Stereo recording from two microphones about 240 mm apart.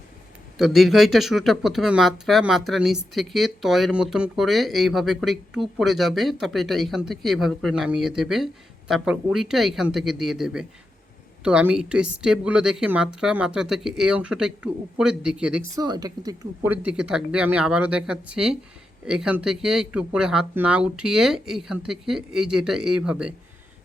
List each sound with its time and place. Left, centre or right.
0.6 s speech: centre
15.7 s speech: centre